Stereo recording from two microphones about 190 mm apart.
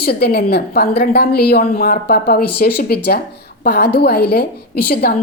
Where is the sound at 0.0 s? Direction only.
55° left (ahead or behind).